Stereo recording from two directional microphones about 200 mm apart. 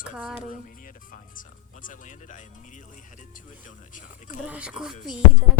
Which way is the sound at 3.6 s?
40° left (ahead or behind).